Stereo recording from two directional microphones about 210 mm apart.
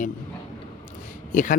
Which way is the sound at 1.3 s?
40° left (ahead or behind).